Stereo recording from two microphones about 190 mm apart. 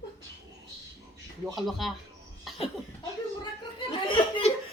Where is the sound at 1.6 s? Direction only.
Centre (ahead or behind).